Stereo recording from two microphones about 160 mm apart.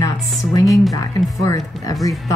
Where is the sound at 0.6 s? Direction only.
Centre (ahead or behind).